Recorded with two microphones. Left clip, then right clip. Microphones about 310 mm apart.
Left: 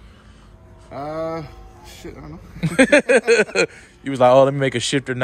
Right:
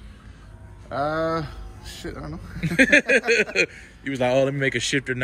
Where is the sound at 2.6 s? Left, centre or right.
Centre.